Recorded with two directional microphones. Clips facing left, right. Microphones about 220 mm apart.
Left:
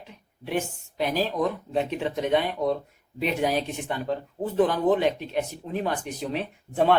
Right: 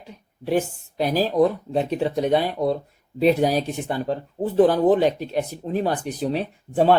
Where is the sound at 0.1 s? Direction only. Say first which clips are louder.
Right 6 dB; 40° right (ahead or behind).